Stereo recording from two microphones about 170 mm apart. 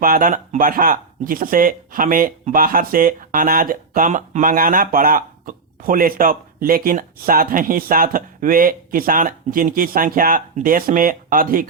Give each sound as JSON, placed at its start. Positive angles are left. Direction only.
{"t": 0.0, "sound": "speech", "side_deg": -55}